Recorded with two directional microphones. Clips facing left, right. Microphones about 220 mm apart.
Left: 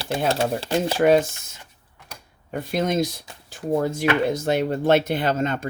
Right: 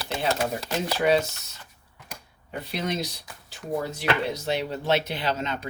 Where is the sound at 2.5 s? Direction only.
50° left (ahead or behind).